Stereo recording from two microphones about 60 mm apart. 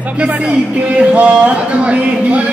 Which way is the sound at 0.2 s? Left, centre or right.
Right.